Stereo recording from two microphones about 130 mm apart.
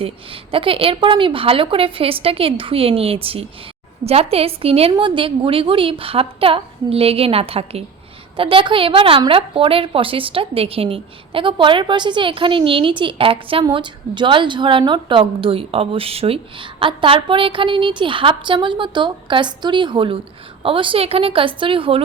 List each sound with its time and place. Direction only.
0.0 s a woman's voice: 45° right (ahead or behind)